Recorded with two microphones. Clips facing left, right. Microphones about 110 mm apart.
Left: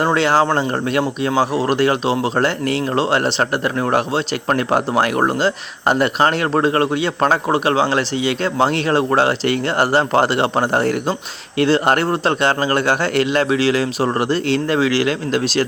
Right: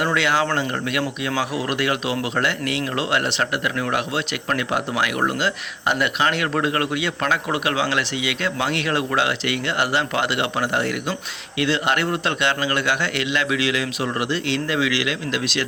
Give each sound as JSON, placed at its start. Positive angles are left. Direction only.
{"t": 0.0, "sound": "speech", "side_deg": 35}